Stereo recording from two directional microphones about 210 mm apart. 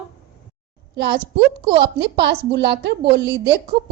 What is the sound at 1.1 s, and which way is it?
Speech, 25° right (ahead or behind).